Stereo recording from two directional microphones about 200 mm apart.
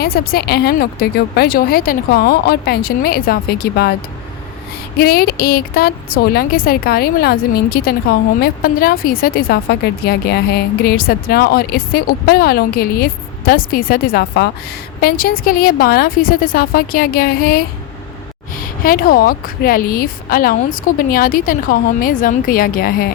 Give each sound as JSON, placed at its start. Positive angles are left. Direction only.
{"t": 0.0, "sound": "a woman's voice", "side_deg": 50}
{"t": 4.9, "sound": "a woman's voice", "side_deg": 50}